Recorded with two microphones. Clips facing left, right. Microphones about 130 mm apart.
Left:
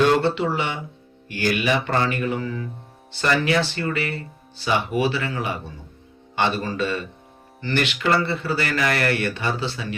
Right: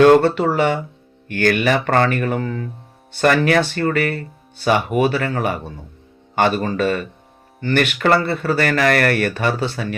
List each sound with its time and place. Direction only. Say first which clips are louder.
0.0 s speech: right 7 dB; 55° right (ahead or behind)